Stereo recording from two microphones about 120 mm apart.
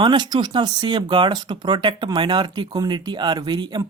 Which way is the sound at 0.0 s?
40° right (ahead or behind).